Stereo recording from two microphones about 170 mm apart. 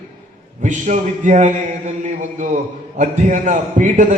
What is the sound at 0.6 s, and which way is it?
A man's voice, 45° right (ahead or behind).